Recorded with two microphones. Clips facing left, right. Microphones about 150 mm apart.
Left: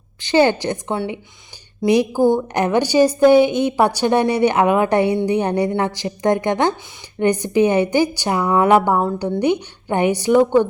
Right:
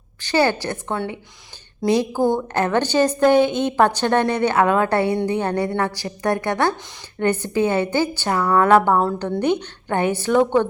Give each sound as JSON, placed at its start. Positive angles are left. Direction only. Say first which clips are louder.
{"t": 0.2, "sound": "a woman's voice", "louder": "left 4 dB", "side_deg": 20}